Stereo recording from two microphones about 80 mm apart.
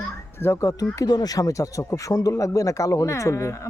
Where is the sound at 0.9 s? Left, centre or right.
Left.